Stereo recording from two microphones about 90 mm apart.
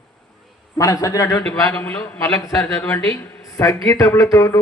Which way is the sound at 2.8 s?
10° left (ahead or behind).